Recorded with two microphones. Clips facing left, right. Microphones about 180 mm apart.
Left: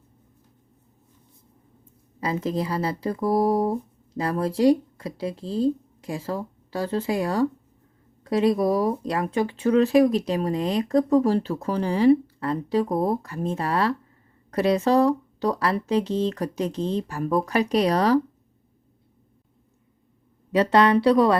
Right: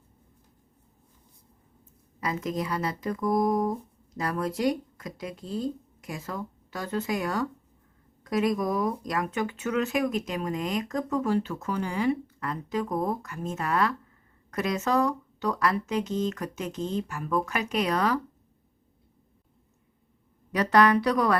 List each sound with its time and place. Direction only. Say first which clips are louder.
1.8 s speech: left 3 dB; 30° left (ahead or behind)
20.5 s a woman's voice: left 3 dB; 25° left (ahead or behind)